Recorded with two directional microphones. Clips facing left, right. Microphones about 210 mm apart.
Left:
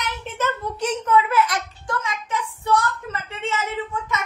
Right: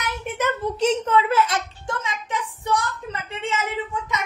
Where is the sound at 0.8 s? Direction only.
25° right (ahead or behind).